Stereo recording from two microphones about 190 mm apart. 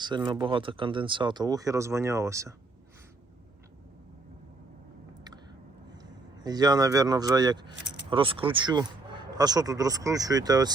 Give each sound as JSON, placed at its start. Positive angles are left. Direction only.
{"t": 0.0, "sound": "speech", "side_deg": -25}
{"t": 6.4, "sound": "speech", "side_deg": -20}